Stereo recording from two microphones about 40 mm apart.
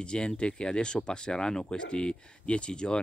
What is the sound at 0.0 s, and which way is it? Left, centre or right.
Speech, left.